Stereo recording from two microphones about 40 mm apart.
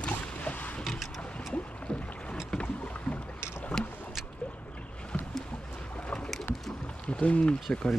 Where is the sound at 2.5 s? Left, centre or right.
Centre.